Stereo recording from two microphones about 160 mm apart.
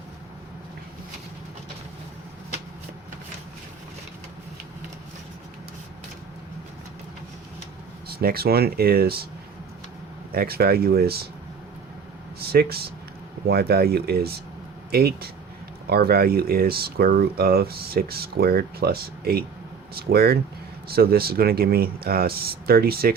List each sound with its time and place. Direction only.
8.0 s speech: 70° right (ahead or behind)
10.3 s speech: 75° right (ahead or behind)
12.4 s a sound: 75° right (ahead or behind)
13.5 s speech: 80° right